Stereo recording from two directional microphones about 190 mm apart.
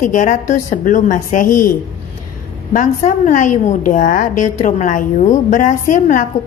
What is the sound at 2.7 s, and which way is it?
A woman's voice, 45° left (ahead or behind).